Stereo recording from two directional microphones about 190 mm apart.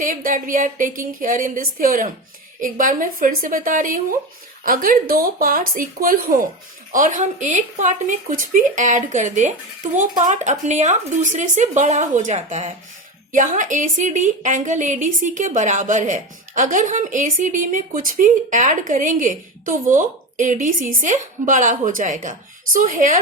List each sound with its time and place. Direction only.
0.0 s a woman's voice: 45° right (ahead or behind)